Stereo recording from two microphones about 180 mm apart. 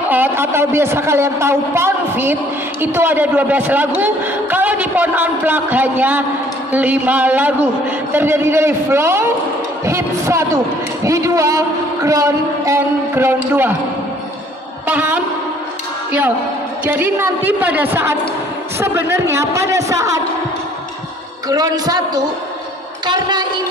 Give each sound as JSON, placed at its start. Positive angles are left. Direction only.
{"t": 0.1, "sound": "a man's voice", "side_deg": -10}
{"t": 14.9, "sound": "a sound", "side_deg": -10}
{"t": 16.8, "sound": "a man's voice", "side_deg": -10}
{"t": 21.5, "sound": "a man's voice", "side_deg": -20}